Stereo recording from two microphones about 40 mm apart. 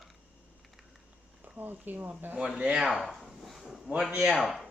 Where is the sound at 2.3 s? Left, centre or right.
Centre.